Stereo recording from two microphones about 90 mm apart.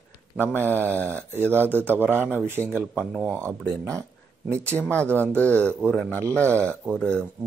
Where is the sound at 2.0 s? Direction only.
20° right (ahead or behind).